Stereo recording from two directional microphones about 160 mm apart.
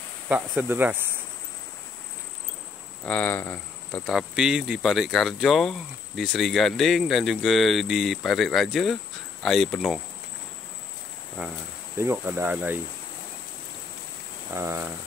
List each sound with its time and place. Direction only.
0.3 s speech: 10° right (ahead or behind)
3.1 s speech: 10° left (ahead or behind)
4.0 s speech: centre (ahead or behind)
12.0 s speech: 15° right (ahead or behind)
14.5 s speech: 15° right (ahead or behind)